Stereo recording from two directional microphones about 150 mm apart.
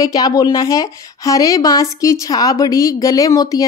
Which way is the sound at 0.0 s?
25° left (ahead or behind).